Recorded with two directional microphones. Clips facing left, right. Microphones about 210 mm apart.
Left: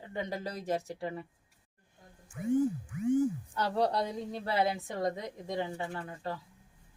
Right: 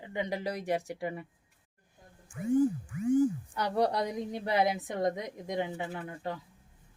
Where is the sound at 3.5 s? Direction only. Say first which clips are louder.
Right 1 dB; 15° right (ahead or behind).